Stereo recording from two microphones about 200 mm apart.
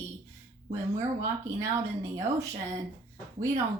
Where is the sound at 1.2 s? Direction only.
15° right (ahead or behind).